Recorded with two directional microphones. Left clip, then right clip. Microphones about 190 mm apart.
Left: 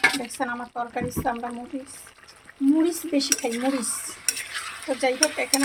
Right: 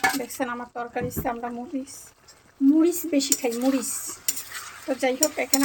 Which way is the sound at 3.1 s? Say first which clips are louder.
Even; 5° right (ahead or behind).